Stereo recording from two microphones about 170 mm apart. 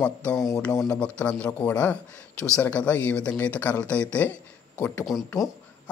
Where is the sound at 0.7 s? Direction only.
20° left (ahead or behind).